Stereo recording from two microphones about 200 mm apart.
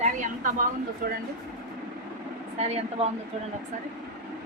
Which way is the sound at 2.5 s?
30° right (ahead or behind).